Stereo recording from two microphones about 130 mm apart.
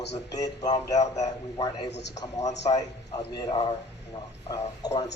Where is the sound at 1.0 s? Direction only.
60° left (ahead or behind).